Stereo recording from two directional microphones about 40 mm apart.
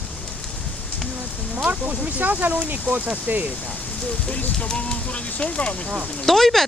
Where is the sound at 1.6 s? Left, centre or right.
Right.